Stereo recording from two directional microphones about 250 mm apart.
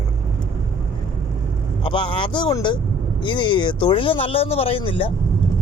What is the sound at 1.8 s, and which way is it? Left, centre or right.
Speech, centre.